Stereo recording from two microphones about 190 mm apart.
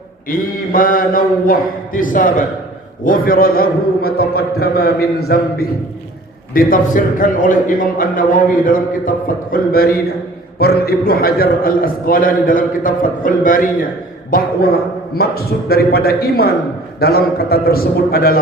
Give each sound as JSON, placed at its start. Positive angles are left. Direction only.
{"t": 0.3, "sound": "a man's voice", "side_deg": 50}